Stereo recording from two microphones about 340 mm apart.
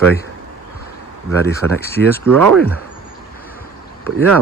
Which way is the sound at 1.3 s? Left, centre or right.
Centre.